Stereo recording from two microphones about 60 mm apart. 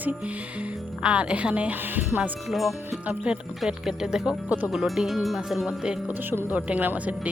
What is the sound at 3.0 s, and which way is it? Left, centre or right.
Speech, right.